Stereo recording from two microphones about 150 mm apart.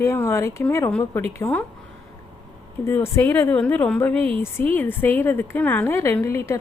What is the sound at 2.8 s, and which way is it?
A woman's voice, 15° left (ahead or behind).